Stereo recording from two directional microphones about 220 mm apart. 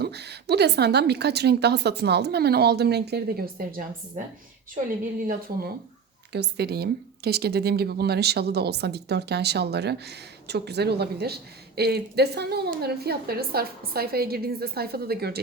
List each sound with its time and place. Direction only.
0.0 s speech: 50° right (ahead or behind)
6.3 s speech: 50° right (ahead or behind)